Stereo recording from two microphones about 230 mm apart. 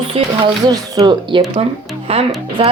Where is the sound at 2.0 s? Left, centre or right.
Right.